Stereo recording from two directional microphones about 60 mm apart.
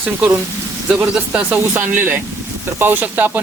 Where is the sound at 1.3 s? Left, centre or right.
Right.